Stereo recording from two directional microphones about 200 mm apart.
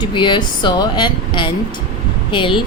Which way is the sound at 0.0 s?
25° left (ahead or behind).